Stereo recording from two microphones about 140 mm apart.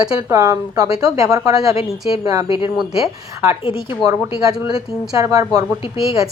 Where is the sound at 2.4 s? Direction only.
40° left (ahead or behind).